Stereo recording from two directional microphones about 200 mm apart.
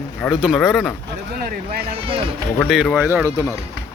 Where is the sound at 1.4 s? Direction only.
50° right (ahead or behind).